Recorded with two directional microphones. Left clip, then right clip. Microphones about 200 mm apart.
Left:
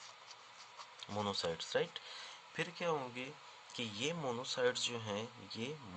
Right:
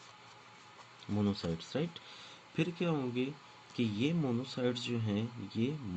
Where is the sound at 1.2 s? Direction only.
30° left (ahead or behind).